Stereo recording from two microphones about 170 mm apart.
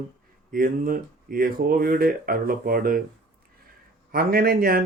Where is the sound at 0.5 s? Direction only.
55° right (ahead or behind).